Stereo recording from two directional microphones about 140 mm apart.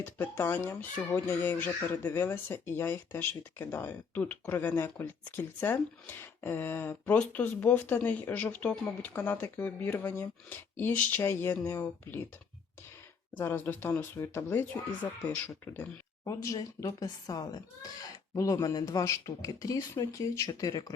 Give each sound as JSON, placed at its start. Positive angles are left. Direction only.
{"t": 0.0, "sound": "speech", "side_deg": 15}
{"t": 13.3, "sound": "speech", "side_deg": 15}